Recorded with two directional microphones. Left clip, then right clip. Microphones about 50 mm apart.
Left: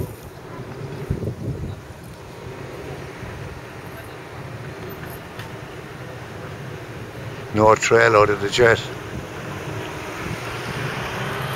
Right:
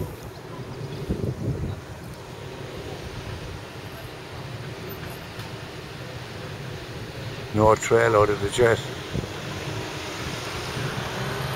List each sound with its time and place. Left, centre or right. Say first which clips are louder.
7.5 s speech: left 4 dB; left
8.7 s vehicle: left 3 dB; right